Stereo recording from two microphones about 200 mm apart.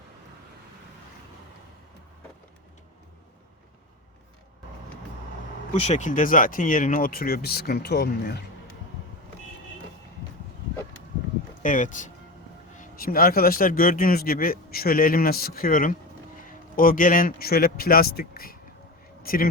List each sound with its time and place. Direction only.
5.8 s speech: 35° left (ahead or behind); by 8.4 s 55° left (ahead or behind)
11.6 s a man's voice: 40° left (ahead or behind)